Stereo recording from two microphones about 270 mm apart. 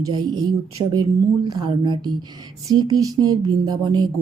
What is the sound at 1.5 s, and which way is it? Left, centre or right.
A woman's voice, centre.